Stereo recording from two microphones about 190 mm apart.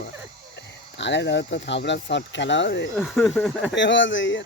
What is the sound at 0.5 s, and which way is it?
Speech, 70° left (ahead or behind).